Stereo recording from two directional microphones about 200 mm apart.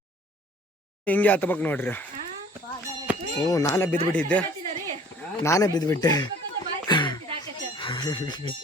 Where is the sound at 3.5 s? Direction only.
15° left (ahead or behind).